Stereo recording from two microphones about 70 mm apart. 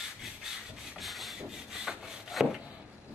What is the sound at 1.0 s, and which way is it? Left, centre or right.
Rub, centre.